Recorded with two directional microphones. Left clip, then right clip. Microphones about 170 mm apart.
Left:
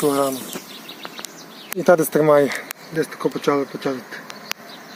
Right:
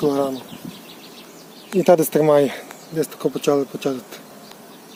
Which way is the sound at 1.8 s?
10° right (ahead or behind).